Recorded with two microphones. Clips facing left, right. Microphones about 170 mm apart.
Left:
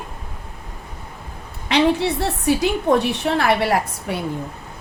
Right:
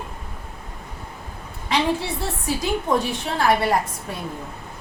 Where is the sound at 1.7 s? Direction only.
70° left (ahead or behind).